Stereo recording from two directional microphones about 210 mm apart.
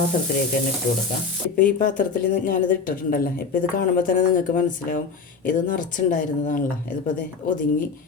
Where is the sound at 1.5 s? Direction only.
40° left (ahead or behind).